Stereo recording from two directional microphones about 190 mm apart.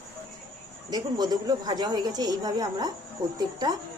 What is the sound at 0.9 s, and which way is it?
A woman's voice, 20° right (ahead or behind).